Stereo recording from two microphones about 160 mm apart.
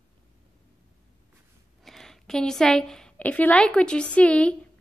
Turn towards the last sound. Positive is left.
turn(degrees=5)  # may be behind; listen again after turning